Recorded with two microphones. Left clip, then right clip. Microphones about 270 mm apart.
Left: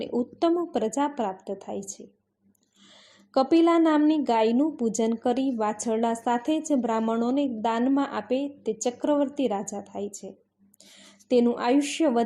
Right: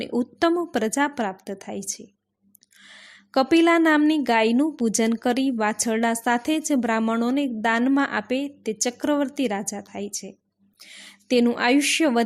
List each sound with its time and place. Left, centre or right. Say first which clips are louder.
0.3 s a woman's voice: right 3 dB; right
3.0 s a woman's voice: right 2 dB; right